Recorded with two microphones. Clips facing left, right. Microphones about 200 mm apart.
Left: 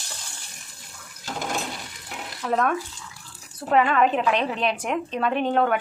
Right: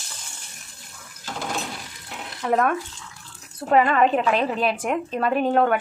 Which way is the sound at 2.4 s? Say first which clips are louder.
Right 2 dB; centre (ahead or behind).